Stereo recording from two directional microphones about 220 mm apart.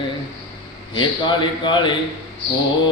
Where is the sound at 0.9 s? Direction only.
20° left (ahead or behind).